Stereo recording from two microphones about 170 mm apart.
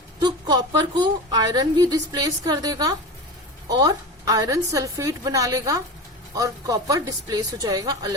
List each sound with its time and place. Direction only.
0.2 s a woman's voice: 25° right (ahead or behind)